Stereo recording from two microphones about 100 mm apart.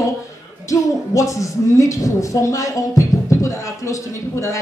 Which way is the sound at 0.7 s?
35° left (ahead or behind).